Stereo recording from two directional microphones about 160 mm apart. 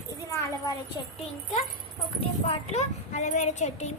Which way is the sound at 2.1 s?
40° left (ahead or behind).